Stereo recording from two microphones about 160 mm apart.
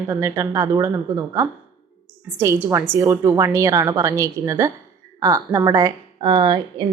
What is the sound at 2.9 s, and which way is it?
A woman's voice, 15° right (ahead or behind).